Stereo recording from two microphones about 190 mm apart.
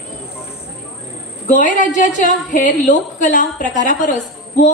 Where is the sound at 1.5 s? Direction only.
40° left (ahead or behind).